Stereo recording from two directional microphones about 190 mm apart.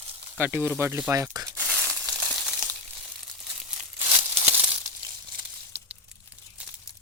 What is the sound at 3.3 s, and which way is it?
Crumpling, 5° right (ahead or behind).